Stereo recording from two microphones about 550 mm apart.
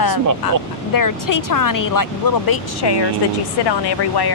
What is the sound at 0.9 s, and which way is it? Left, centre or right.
Speech, left.